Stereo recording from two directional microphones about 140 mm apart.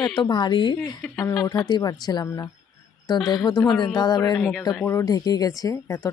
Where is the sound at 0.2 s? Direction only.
30° left (ahead or behind).